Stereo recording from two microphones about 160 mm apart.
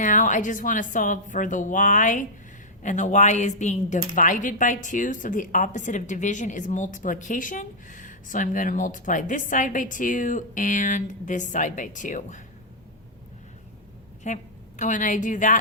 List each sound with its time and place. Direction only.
0.0 s speech: 55° left (ahead or behind)
14.3 s speech: 45° left (ahead or behind)